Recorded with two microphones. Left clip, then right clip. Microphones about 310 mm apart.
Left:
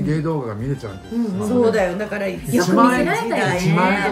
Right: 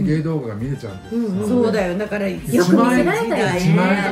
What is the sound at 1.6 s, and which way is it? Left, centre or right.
Speech, centre.